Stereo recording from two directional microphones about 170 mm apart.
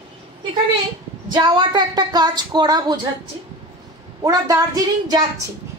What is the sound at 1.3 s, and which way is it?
A woman's voice, 25° right (ahead or behind).